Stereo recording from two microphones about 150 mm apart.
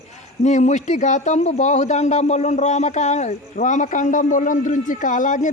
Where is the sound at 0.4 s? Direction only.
50° left (ahead or behind).